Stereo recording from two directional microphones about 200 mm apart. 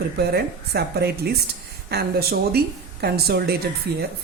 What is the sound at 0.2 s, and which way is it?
Speech, 55° right (ahead or behind).